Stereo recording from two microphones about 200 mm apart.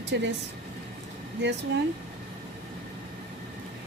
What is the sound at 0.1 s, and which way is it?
Speech, 60° right (ahead or behind).